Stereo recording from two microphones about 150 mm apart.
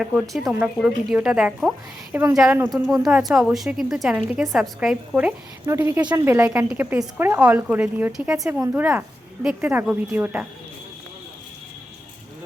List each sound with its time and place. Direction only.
0.0 s speech: 5° right (ahead or behind)
5.6 s a woman's voice: 20° right (ahead or behind)